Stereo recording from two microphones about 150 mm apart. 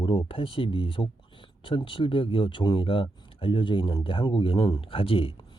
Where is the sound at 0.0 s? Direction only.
35° left (ahead or behind).